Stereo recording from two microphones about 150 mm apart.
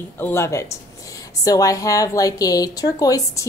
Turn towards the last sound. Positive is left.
turn(degrees=20)  # may be behind; listen again after turning